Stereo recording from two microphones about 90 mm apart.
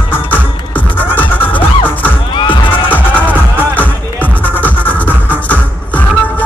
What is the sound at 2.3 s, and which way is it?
Music, 70° left (ahead or behind).